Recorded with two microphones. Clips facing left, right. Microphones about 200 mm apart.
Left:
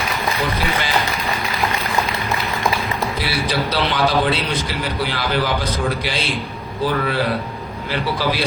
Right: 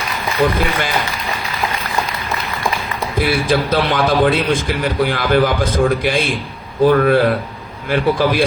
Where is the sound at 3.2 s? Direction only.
50° right (ahead or behind).